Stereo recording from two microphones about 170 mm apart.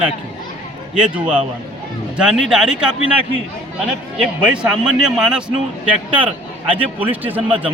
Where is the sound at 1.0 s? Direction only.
5° right (ahead or behind).